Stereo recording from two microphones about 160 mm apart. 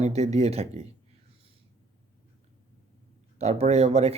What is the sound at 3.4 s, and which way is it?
Speech, 40° right (ahead or behind).